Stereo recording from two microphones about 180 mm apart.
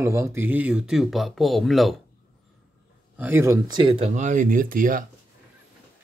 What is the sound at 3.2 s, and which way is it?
Speech, 10° right (ahead or behind).